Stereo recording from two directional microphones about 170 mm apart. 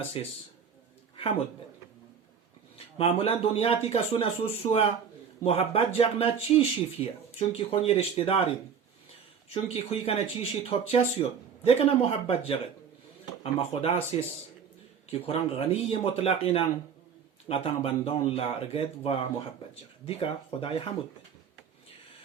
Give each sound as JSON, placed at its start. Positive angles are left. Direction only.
{"t": 0.0, "sound": "speech", "side_deg": 35}
{"t": 2.7, "sound": "speech", "side_deg": 35}
{"t": 9.7, "sound": "speech", "side_deg": 35}